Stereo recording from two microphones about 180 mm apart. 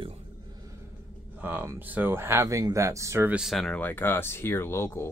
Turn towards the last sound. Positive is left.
turn(degrees=15)  # may be behind; listen again after turning